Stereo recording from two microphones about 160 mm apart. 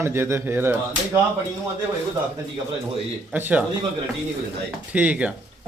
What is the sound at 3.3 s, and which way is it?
Speech, 10° right (ahead or behind).